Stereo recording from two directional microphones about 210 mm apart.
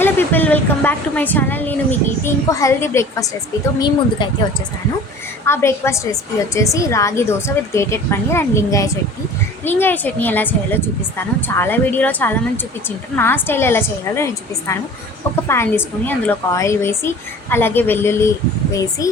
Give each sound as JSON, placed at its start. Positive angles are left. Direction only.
{"t": 0.0, "sound": "a woman's voice", "side_deg": 10}
{"t": 5.5, "sound": "a woman's voice", "side_deg": 10}
{"t": 15.4, "sound": "a woman's voice", "side_deg": 10}